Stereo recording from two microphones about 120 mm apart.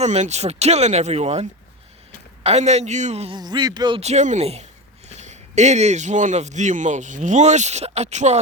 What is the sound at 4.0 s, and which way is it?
Speech, 70° right (ahead or behind).